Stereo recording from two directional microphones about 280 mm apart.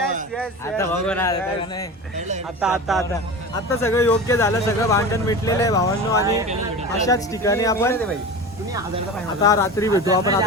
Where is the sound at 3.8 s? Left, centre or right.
Centre.